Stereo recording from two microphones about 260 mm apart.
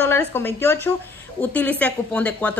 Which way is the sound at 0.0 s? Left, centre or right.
Centre.